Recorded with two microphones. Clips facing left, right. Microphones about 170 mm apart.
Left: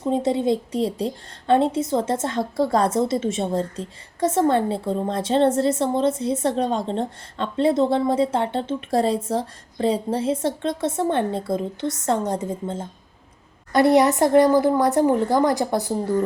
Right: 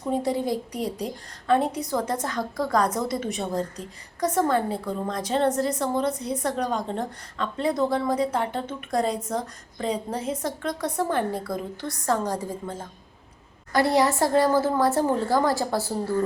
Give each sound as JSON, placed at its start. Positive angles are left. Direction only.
{"t": 0.0, "sound": "a woman's voice", "side_deg": 25}